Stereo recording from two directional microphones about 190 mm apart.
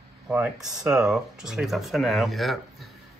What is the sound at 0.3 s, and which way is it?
Speech, 5° right (ahead or behind).